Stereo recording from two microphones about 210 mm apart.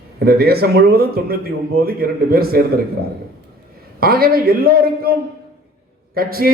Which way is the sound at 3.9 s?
45° right (ahead or behind).